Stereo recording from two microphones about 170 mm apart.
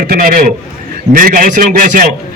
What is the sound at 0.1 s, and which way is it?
A man's voice, 55° right (ahead or behind).